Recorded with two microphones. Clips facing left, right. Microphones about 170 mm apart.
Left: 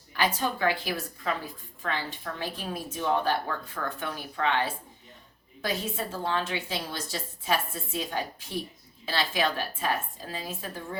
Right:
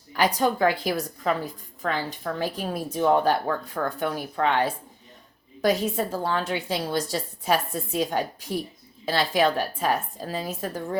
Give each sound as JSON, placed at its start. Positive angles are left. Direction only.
{"t": 0.2, "sound": "a woman's voice", "side_deg": -40}